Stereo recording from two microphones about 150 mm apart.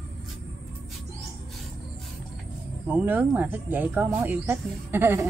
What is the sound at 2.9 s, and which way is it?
Speech, 15° right (ahead or behind).